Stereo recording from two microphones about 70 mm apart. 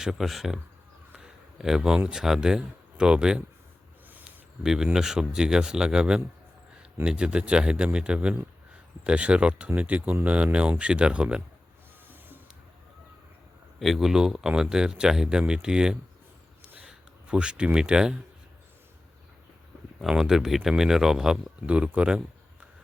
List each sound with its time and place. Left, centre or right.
0.0 s speech: centre
1.1 s a sound: centre
2.0 s speech: centre
4.6 s speech: centre
13.7 s speech: centre
16.8 s a sound: centre
17.7 s speech: centre
20.0 s speech: centre